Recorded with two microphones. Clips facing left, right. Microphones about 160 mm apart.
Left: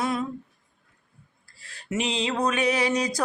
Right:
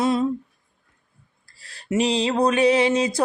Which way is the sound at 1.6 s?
35° right (ahead or behind).